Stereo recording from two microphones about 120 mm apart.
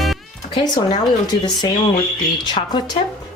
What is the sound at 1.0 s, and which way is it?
Speech, 35° left (ahead or behind).